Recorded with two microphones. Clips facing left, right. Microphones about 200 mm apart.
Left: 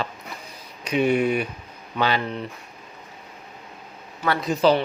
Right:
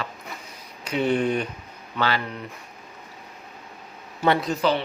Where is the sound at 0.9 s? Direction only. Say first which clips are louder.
Left 2 dB; 15° left (ahead or behind).